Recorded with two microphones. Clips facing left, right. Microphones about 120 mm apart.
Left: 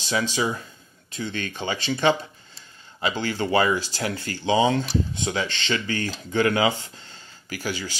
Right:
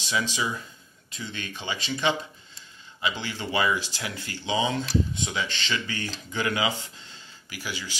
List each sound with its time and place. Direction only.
0.0 s speech: 35° left (ahead or behind)